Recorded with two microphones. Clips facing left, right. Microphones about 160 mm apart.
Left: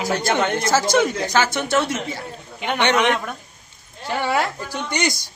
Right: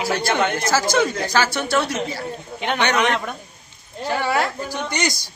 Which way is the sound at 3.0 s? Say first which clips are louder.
Left 1 dB; 5° left (ahead or behind).